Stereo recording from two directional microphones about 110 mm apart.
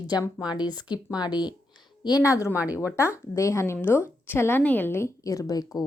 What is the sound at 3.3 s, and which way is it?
A woman's voice, 25° left (ahead or behind).